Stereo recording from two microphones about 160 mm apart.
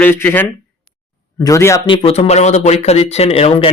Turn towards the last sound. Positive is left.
turn(degrees=35)  # may be behind; listen again after turning